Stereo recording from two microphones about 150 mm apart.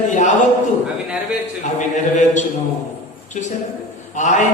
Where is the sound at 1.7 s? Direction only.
55° left (ahead or behind).